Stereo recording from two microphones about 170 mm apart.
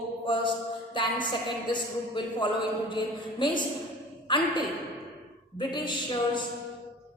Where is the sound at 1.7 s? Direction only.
30° left (ahead or behind).